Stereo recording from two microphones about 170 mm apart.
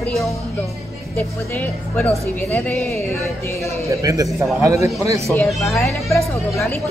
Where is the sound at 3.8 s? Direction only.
20° right (ahead or behind).